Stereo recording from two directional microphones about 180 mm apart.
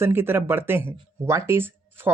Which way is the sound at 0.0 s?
10° right (ahead or behind).